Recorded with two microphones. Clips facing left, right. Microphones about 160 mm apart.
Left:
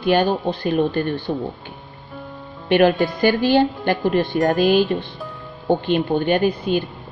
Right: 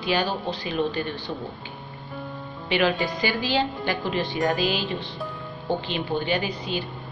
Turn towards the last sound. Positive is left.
turn(degrees=55)  # may be behind; listen again after turning